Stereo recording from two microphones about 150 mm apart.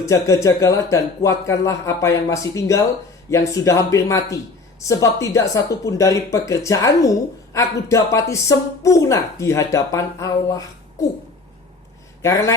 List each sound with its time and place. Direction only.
0.0 s speech: 20° left (ahead or behind)
12.2 s speech: 20° left (ahead or behind)